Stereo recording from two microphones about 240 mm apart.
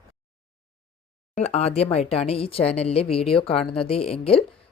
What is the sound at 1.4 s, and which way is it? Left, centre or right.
Speech, left.